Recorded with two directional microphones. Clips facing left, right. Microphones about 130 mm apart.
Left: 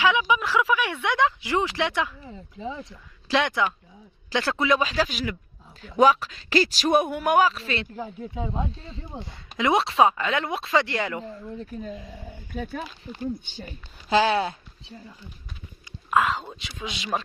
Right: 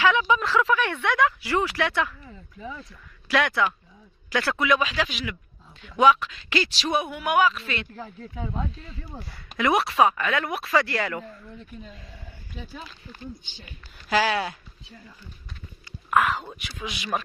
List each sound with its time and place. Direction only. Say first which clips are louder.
0.0 s a man's voice: right 1 dB; 15° left (ahead or behind); by 7.9 s 30° left (ahead or behind)
7.9 s speech: left 4 dB; 15° left (ahead or behind)
11.6 s a man's voice: left 8 dB; 40° left (ahead or behind)
12.2 s speech: left 7 dB; 50° left (ahead or behind)
13.2 s a man's voice: left 10 dB; 40° left (ahead or behind)
14.1 s speech: left 3 dB; 25° left (ahead or behind)
16.0 s speech: even; 20° left (ahead or behind)